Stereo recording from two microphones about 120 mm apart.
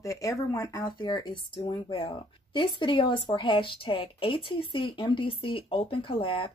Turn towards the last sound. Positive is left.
turn(degrees=45)  # may be behind; listen again after turning